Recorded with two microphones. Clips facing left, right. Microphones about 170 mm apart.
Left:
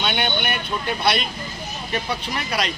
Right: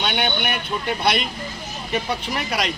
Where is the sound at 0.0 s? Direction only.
10° right (ahead or behind).